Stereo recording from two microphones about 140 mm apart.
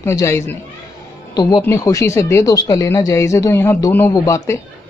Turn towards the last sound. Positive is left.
turn(degrees=20)  # may be behind; listen again after turning